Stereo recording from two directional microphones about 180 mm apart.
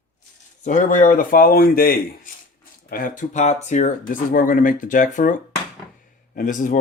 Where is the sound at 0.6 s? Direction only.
45° left (ahead or behind).